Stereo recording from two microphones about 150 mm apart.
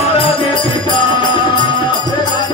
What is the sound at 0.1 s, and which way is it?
Music, 35° left (ahead or behind).